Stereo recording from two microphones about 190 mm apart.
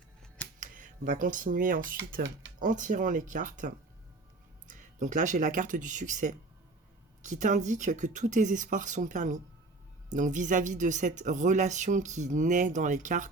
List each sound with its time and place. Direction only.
0.6 s speech: 45° right (ahead or behind)